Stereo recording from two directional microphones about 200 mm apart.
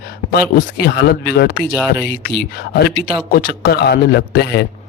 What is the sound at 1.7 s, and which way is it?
Speech, 5° left (ahead or behind).